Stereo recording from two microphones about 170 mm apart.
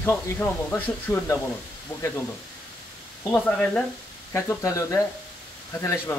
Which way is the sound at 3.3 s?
10° left (ahead or behind).